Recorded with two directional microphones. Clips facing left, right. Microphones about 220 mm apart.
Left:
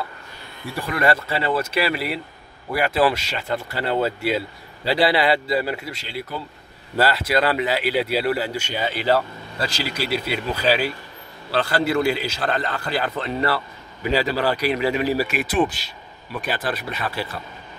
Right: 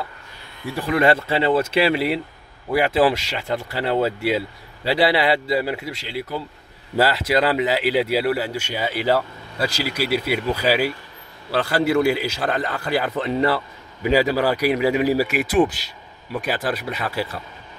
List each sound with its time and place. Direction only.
0.8 s speech: 20° right (ahead or behind)
7.0 s speech: 15° right (ahead or behind)